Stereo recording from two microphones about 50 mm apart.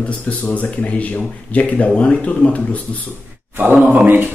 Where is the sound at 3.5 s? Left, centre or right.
Right.